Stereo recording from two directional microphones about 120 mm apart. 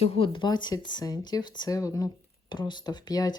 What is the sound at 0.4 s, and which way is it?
Speech, 35° left (ahead or behind).